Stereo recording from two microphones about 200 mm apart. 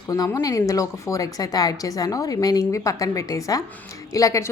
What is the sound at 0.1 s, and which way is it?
A woman's voice, 15° left (ahead or behind).